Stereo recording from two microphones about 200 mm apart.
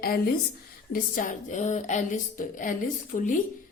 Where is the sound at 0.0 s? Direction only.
50° left (ahead or behind).